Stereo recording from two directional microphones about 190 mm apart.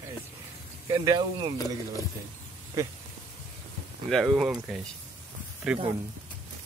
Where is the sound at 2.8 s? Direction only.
15° right (ahead or behind).